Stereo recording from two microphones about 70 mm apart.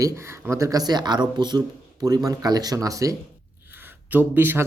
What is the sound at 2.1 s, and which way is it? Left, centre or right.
Speech, right.